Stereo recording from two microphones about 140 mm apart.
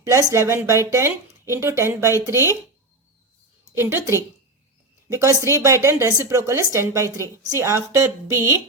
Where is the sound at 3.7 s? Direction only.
15° right (ahead or behind).